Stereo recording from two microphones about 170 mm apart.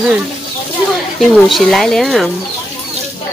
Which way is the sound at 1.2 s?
Centre (ahead or behind).